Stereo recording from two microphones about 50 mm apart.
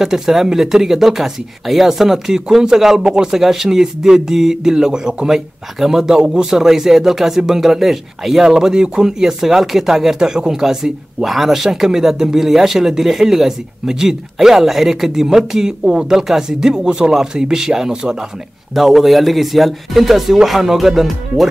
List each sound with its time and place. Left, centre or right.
0.0 s speech: centre